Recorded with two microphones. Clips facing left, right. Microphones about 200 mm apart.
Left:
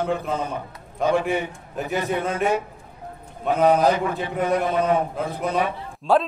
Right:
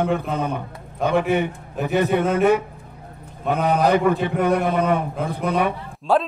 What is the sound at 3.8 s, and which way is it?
Speech, 60° right (ahead or behind).